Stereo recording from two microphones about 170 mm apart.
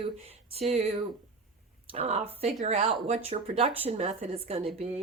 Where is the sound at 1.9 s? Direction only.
40° right (ahead or behind).